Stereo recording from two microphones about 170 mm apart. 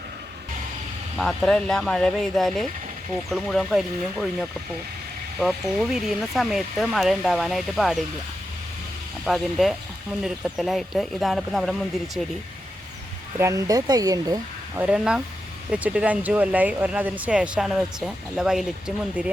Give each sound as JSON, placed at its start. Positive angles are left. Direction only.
{"t": 1.1, "sound": "speech", "side_deg": 0}
{"t": 9.2, "sound": "speech", "side_deg": 0}
{"t": 13.4, "sound": "speech", "side_deg": -20}
{"t": 14.8, "sound": "speech", "side_deg": -5}